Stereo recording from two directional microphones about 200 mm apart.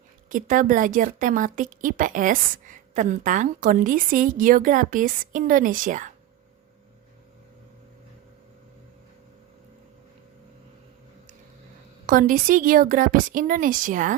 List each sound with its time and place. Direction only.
0.3 s a woman's voice: 40° right (ahead or behind)
12.0 s a woman's voice: 45° right (ahead or behind)